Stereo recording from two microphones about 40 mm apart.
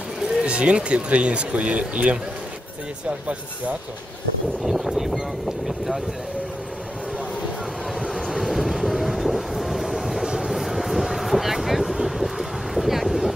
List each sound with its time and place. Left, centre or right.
0.4 s speech: right
4.6 s speech: centre
8.0 s vehicle: centre
10.2 s vehicle: centre
10.5 s vehicle: centre